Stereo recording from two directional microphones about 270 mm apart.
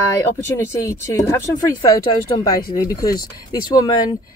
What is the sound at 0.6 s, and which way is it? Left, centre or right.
Speech, centre.